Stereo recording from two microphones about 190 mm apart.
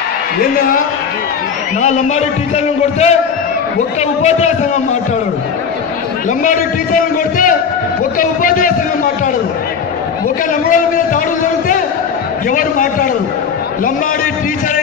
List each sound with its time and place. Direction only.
0.6 s a man's voice: 50° left (ahead or behind)
1.8 s a man's voice: 40° left (ahead or behind)
4.2 s a man's voice: 35° left (ahead or behind)
6.4 s a man's voice: 45° left (ahead or behind)
10.7 s a man's voice: 45° left (ahead or behind)